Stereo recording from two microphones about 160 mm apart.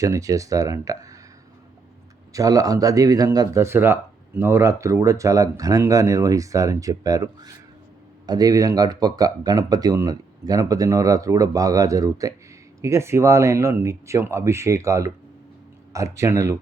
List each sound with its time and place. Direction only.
0.0 s speech: 20° right (ahead or behind)
2.3 s speech: 20° right (ahead or behind)